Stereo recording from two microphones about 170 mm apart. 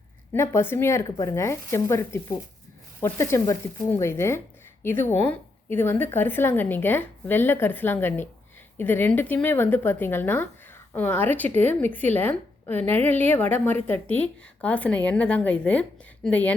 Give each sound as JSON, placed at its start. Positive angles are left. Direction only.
{"t": 0.3, "sound": "a woman's voice", "side_deg": 15}